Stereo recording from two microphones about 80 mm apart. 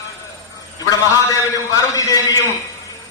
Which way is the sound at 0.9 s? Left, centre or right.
Left.